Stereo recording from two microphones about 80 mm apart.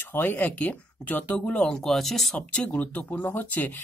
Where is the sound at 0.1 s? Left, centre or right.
Left; by 2.3 s centre.